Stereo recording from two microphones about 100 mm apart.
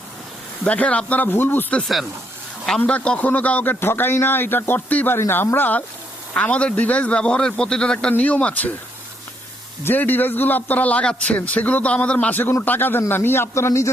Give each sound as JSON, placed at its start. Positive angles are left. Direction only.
{"t": 0.6, "sound": "a man's voice", "side_deg": 15}
{"t": 2.6, "sound": "a man's voice", "side_deg": 10}
{"t": 9.8, "sound": "a man's voice", "side_deg": 20}